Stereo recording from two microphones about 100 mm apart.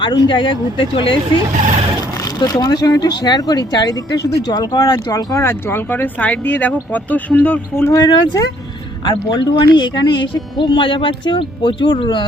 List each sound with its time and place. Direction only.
0.0 s speech: 55° left (ahead or behind)
2.2 s speech: 45° left (ahead or behind); by 7.9 s 15° left (ahead or behind)
8.0 s speech: 40° left (ahead or behind)